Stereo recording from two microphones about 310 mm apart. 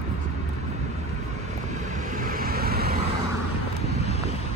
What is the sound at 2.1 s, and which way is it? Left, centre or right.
Vehicle, right.